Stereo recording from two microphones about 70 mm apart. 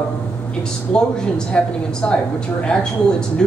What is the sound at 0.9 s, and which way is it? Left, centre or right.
A woman's voice, centre.